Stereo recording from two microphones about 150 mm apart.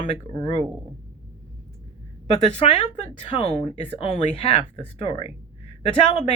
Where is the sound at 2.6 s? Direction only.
40° left (ahead or behind).